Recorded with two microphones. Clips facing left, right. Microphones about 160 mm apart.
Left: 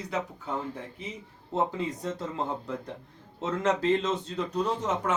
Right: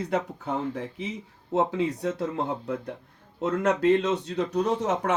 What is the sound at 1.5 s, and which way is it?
Speech, 75° right (ahead or behind).